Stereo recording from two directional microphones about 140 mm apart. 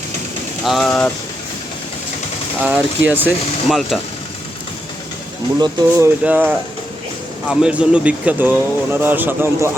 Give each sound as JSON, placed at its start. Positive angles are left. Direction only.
{"t": 0.6, "sound": "speech", "side_deg": 0}
{"t": 2.6, "sound": "speech", "side_deg": -15}
{"t": 3.7, "sound": "speech", "side_deg": 0}
{"t": 5.5, "sound": "speech", "side_deg": -25}
{"t": 6.2, "sound": "speech", "side_deg": -10}